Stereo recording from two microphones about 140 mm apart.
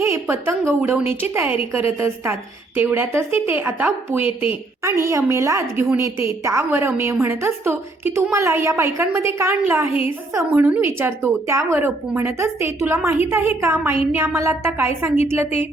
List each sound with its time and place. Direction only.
0.0 s a woman's voice: 20° right (ahead or behind)